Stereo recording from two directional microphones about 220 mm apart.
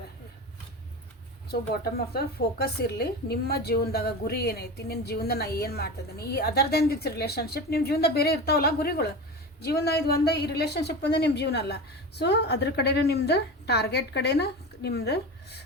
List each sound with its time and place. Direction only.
1.5 s speech: 45° left (ahead or behind)